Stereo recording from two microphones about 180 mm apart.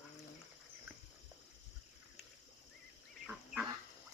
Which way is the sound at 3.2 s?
5° right (ahead or behind).